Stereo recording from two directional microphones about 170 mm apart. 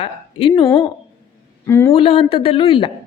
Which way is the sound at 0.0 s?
35° left (ahead or behind).